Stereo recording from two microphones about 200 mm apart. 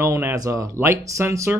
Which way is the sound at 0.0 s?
15° right (ahead or behind).